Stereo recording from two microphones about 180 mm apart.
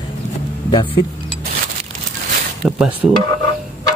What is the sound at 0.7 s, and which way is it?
Speech, 25° left (ahead or behind).